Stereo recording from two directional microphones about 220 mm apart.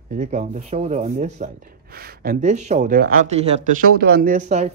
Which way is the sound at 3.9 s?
45° right (ahead or behind).